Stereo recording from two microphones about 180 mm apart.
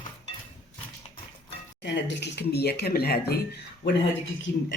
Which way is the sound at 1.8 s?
75° left (ahead or behind).